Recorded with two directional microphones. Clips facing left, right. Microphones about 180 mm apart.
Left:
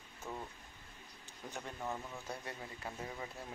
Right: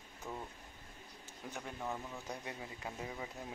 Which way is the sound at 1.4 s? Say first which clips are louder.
Even; 5° right (ahead or behind).